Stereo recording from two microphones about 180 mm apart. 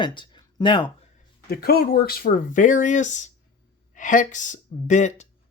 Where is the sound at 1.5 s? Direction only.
60° left (ahead or behind).